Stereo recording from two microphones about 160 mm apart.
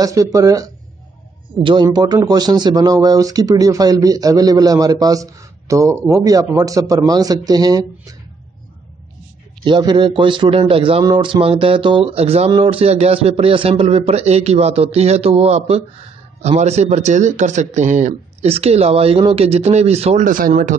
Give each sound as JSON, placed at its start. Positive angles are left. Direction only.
{"t": 0.0, "sound": "speech", "side_deg": -20}
{"t": 1.5, "sound": "speech", "side_deg": -30}
{"t": 9.7, "sound": "a man's voice", "side_deg": -30}
{"t": 20.2, "sound": "speech", "side_deg": -60}